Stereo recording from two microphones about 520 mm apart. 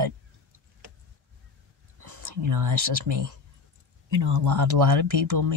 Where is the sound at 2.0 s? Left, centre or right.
Right.